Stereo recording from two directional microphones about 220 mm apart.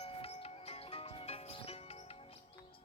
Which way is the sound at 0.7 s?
25° left (ahead or behind).